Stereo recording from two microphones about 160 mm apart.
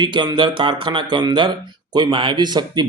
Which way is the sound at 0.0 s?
25° right (ahead or behind).